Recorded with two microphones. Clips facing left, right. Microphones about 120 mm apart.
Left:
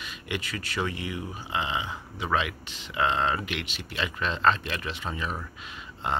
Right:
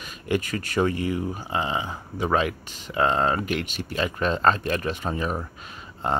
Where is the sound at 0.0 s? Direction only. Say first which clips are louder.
Right 8 dB; 45° right (ahead or behind).